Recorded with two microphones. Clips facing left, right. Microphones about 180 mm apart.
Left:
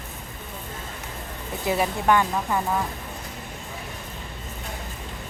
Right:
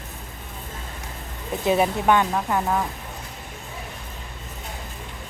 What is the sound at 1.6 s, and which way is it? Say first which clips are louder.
Speech: right 3 dB; 20° right (ahead or behind).